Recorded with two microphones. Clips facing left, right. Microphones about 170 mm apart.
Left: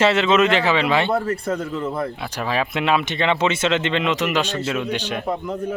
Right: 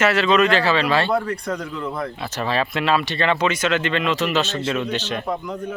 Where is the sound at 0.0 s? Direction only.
20° left (ahead or behind).